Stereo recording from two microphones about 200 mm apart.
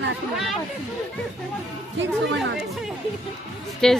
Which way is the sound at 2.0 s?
60° right (ahead or behind).